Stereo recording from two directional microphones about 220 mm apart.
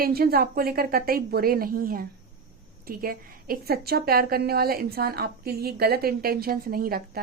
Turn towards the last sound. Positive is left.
turn(degrees=-40)  # may be behind; listen again after turning